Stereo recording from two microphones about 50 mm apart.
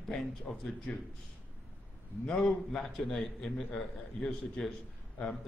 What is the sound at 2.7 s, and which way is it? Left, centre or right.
A man's voice, centre.